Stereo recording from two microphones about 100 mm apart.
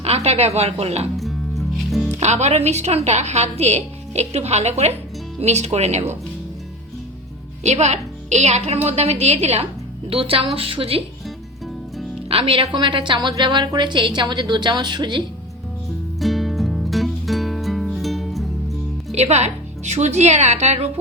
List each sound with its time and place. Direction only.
0.0 s a woman's voice: 90° right
1.1 s music: centre (ahead or behind)
2.5 s a woman's voice: 90° right
8.4 s a woman's voice: 90° right
10.1 s speech: 70° right (ahead or behind)
12.3 s a woman's voice: 65° right (ahead or behind); by 15.2 s 50° right (ahead or behind)
16.2 s music: centre (ahead or behind)
19.1 s a woman's voice: 90° right